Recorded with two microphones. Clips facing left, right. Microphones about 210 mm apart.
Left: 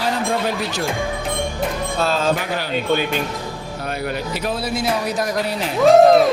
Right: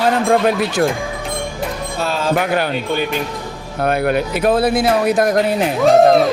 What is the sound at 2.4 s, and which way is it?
Speech, 55° right (ahead or behind).